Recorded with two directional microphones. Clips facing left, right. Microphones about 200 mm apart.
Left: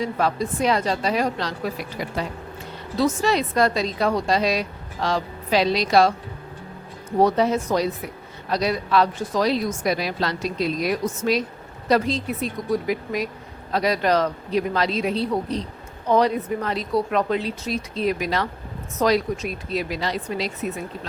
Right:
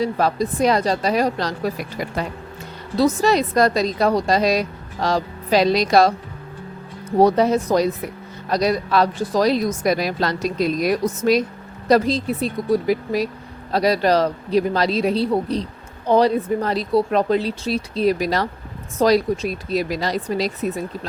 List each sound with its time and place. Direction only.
0.0 s a woman's voice: 40° right (ahead or behind)
7.2 s a woman's voice: 40° right (ahead or behind)